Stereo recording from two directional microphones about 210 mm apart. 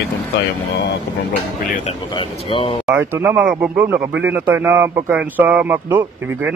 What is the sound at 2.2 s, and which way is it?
Speech, 25° left (ahead or behind).